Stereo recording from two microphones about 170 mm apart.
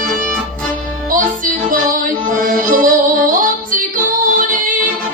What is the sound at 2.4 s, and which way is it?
Music, 55° right (ahead or behind).